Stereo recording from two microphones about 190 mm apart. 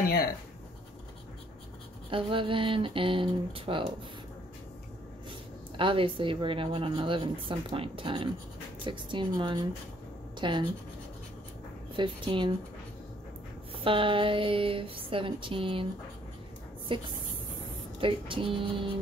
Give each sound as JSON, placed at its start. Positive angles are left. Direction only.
{"t": 0.0, "sound": "writing", "side_deg": 55}
{"t": 2.0, "sound": "speech", "side_deg": -25}
{"t": 5.8, "sound": "speech", "side_deg": -25}
{"t": 11.9, "sound": "speech", "side_deg": -25}
{"t": 13.7, "sound": "speech", "side_deg": -25}
{"t": 16.9, "sound": "speech", "side_deg": -25}